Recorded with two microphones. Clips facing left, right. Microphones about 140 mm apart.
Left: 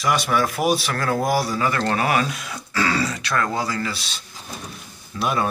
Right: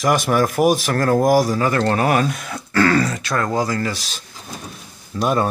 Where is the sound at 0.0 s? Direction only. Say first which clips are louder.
Right 4 dB; 45° right (ahead or behind).